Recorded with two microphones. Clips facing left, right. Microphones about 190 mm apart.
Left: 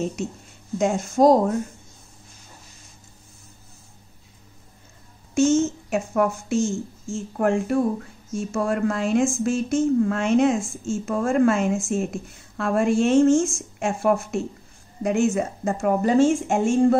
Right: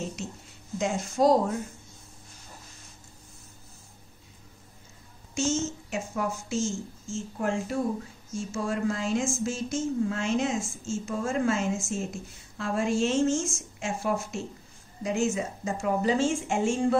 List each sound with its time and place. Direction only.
0.7 s a woman's voice: 50° left (ahead or behind)
5.3 s a woman's voice: 60° left (ahead or behind)